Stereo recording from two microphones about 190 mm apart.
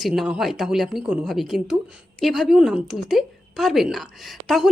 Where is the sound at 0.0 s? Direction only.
5° right (ahead or behind).